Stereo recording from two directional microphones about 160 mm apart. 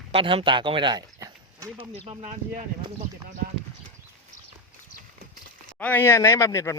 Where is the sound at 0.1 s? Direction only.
35° right (ahead or behind); by 1.9 s 20° right (ahead or behind).